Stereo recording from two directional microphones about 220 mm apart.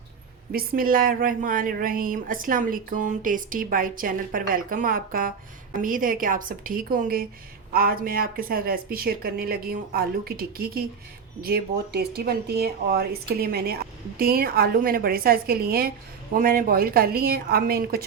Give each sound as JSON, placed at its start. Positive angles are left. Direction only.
{"t": 0.5, "sound": "a woman's voice", "side_deg": -40}